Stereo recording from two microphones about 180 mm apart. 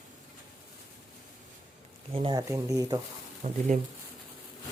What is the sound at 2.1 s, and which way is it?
Speech, 25° right (ahead or behind).